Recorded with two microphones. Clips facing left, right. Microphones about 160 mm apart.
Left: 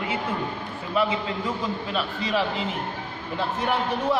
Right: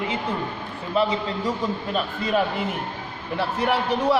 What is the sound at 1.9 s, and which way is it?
Speech, 45° right (ahead or behind).